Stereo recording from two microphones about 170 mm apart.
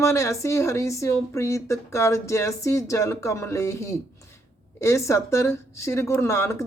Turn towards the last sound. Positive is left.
turn(degrees=15)  # may be behind; listen again after turning